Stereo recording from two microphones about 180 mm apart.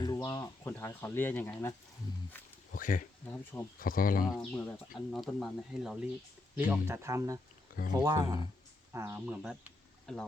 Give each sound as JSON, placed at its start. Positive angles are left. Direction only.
{"t": 0.0, "sound": "speech", "side_deg": 20}
{"t": 2.7, "sound": "speech", "side_deg": 50}
{"t": 3.2, "sound": "speech", "side_deg": 10}
{"t": 3.8, "sound": "speech", "side_deg": 50}
{"t": 4.2, "sound": "speech", "side_deg": 0}
{"t": 6.6, "sound": "speech", "side_deg": -10}